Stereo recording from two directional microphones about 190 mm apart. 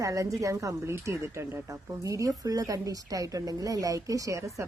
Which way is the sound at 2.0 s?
15° right (ahead or behind).